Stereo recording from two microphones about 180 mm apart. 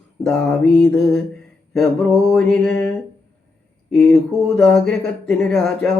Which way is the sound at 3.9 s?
Centre (ahead or behind).